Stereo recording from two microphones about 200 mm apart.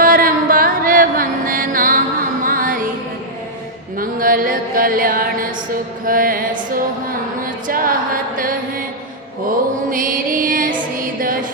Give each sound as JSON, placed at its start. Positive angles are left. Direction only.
{"t": 0.0, "sound": "music", "side_deg": -45}
{"t": 3.9, "sound": "mantra", "side_deg": -45}
{"t": 7.7, "sound": "music", "side_deg": -45}
{"t": 9.9, "sound": "music", "side_deg": -45}